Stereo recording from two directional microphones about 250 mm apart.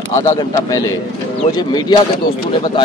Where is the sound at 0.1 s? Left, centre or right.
Centre.